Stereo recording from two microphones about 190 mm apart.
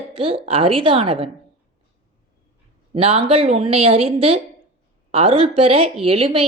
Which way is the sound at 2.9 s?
30° right (ahead or behind).